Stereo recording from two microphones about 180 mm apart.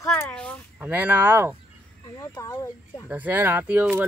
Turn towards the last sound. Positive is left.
turn(degrees=-10)  # may be behind; listen again after turning